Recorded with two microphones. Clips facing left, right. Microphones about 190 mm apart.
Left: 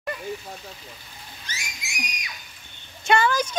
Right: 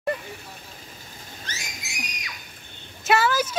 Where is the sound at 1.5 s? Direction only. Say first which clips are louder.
Right 1 dB; 10° left (ahead or behind).